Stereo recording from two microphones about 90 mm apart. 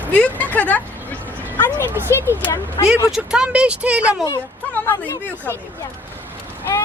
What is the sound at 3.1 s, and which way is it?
Speech, 10° right (ahead or behind).